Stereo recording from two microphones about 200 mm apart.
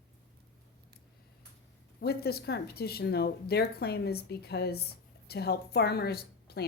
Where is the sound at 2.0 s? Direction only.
50° left (ahead or behind).